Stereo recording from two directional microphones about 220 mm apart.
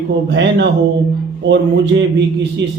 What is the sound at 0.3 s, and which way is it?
Speech, 55° right (ahead or behind).